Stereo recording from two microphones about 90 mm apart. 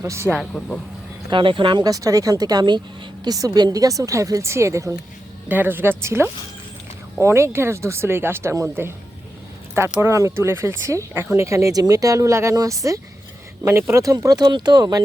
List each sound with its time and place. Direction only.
0.0 s a woman's voice: 30° right (ahead or behind)
1.3 s speech: 70° right (ahead or behind)
1.8 s a woman's voice: 40° right (ahead or behind)
5.5 s a woman's voice: 20° right (ahead or behind); by 15.0 s 50° right (ahead or behind)